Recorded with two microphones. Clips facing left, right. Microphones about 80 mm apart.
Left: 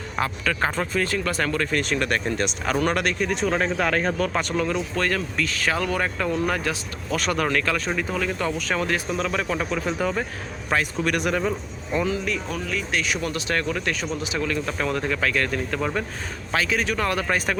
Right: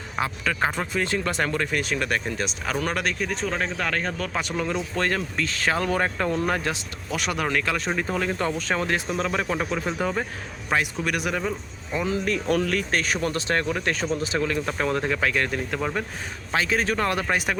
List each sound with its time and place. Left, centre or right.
0.2 s speech: centre
4.4 s speech: centre
4.9 s speech: right
7.1 s speech: centre
7.9 s speech: right; by 11.5 s centre
12.0 s speech: right
17.2 s speech: centre